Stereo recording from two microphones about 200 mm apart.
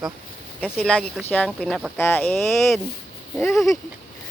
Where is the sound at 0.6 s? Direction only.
Centre (ahead or behind).